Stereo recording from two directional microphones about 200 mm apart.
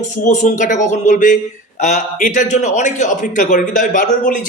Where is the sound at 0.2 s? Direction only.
40° left (ahead or behind).